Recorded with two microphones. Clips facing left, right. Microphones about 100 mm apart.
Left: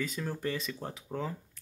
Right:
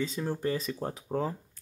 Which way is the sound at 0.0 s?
25° right (ahead or behind).